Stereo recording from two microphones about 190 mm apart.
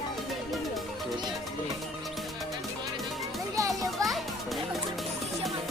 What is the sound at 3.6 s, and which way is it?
Children playing, 15° right (ahead or behind).